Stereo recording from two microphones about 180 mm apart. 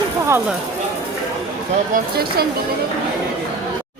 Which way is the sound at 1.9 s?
60° right (ahead or behind).